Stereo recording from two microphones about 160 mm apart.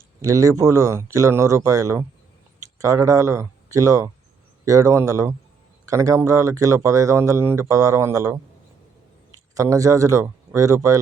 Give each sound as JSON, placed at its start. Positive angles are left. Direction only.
{"t": 0.2, "sound": "speech", "side_deg": -20}
{"t": 9.6, "sound": "speech", "side_deg": -20}